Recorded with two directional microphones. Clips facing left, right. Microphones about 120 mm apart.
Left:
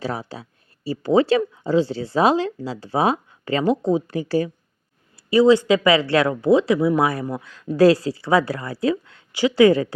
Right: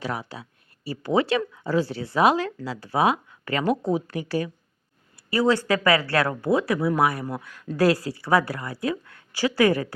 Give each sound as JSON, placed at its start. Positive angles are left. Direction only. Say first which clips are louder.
{"t": 0.0, "sound": "speech", "louder": "left 3 dB", "side_deg": 30}
{"t": 5.1, "sound": "speech", "louder": "left 7 dB", "side_deg": 20}